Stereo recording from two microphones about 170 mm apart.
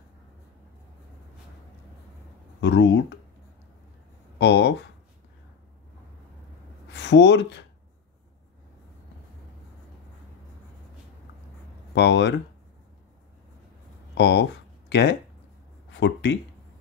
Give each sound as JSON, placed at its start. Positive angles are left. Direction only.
{"t": 2.6, "sound": "speech", "side_deg": 90}
{"t": 4.4, "sound": "speech", "side_deg": 90}
{"t": 6.9, "sound": "speech", "side_deg": 90}
{"t": 11.9, "sound": "speech", "side_deg": 90}
{"t": 14.1, "sound": "speech", "side_deg": 90}